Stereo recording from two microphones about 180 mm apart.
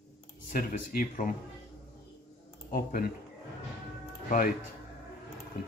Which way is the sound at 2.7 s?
55° left (ahead or behind).